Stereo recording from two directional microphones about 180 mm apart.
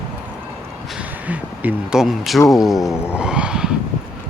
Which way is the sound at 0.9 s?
5° right (ahead or behind).